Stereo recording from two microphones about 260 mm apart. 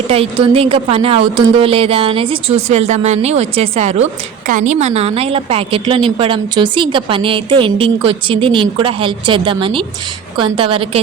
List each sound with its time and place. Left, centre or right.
0.1 s a woman's voice: right